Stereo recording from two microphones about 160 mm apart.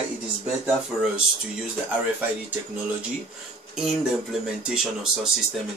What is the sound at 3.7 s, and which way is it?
Speech, 5° right (ahead or behind).